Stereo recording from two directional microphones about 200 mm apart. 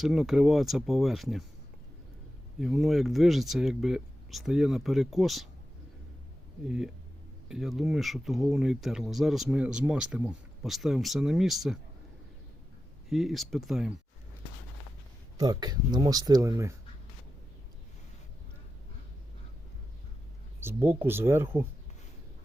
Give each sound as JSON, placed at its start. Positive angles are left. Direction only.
{"t": 0.0, "sound": "speech", "side_deg": 0}
{"t": 2.6, "sound": "speech", "side_deg": 0}
{"t": 6.7, "sound": "speech", "side_deg": 0}
{"t": 13.1, "sound": "speech", "side_deg": 0}
{"t": 15.4, "sound": "speech", "side_deg": -20}
{"t": 20.6, "sound": "speech", "side_deg": -10}